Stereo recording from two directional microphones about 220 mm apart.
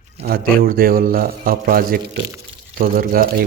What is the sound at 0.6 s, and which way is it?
Speech, 40° right (ahead or behind).